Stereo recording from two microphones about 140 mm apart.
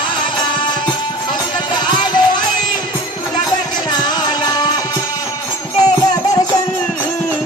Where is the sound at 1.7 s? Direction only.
30° left (ahead or behind).